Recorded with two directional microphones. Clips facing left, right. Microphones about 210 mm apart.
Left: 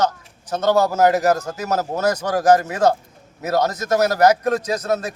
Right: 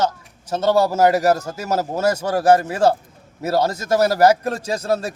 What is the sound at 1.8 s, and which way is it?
A man's voice, 30° right (ahead or behind).